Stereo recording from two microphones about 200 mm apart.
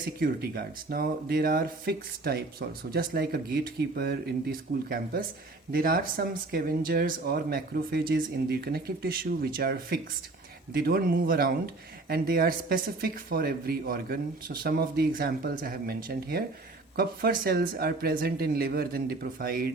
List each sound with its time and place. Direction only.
0.2 s speech: 50° right (ahead or behind)